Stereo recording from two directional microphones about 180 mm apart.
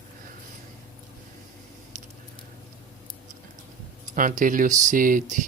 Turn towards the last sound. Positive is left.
turn(degrees=-45)  # may be behind; listen again after turning